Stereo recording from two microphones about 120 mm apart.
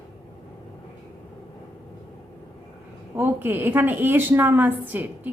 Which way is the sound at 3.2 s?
15° right (ahead or behind).